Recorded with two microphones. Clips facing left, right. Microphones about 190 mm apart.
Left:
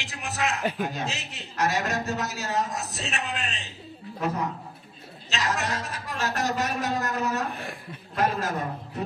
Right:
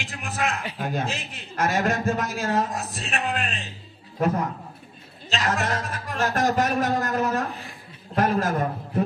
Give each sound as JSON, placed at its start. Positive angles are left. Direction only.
{"t": 0.0, "sound": "a man's voice", "side_deg": -55}
{"t": 5.3, "sound": "a man's voice", "side_deg": -50}